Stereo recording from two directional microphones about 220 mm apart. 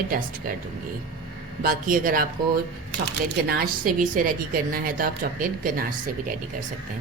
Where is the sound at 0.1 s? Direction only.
40° right (ahead or behind).